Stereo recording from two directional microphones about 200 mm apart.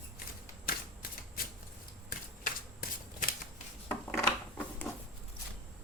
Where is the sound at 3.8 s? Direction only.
10° left (ahead or behind).